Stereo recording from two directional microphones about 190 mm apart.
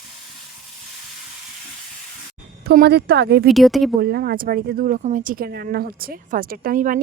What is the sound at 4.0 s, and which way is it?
Speech, 55° right (ahead or behind).